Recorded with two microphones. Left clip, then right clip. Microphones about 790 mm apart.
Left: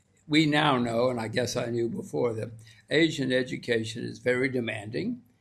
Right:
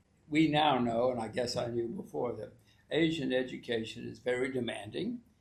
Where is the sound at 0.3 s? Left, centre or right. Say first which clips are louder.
Left 4 dB; left.